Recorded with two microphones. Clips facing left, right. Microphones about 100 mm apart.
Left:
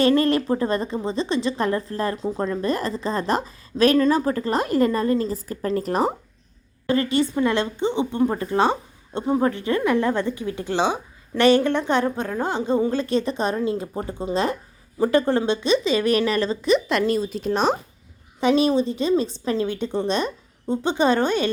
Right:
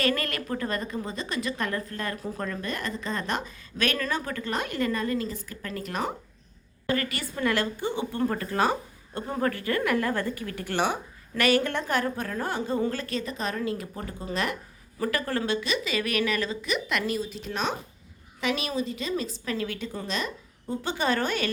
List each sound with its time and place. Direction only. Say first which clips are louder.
0.0 s a woman's voice: left 10 dB; 30° left (ahead or behind)